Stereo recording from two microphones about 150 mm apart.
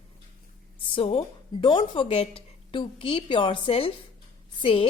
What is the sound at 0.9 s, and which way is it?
A woman's voice, 45° left (ahead or behind).